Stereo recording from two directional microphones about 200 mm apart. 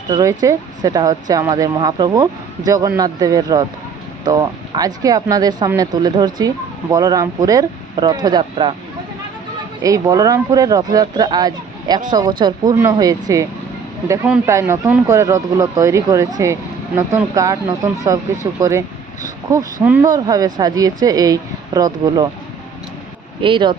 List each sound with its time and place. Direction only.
0.1 s speech: 15° right (ahead or behind)
9.8 s speech: 15° right (ahead or behind)
19.5 s speech: 10° right (ahead or behind)
23.4 s speech: 25° right (ahead or behind)